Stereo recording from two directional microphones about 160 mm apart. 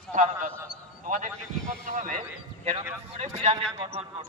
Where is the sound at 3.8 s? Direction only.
35° right (ahead or behind).